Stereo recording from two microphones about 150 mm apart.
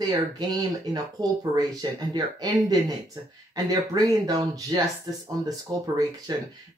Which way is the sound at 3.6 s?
25° right (ahead or behind).